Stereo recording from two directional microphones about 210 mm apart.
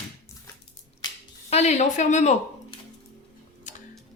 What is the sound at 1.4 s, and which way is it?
Speech, 30° left (ahead or behind).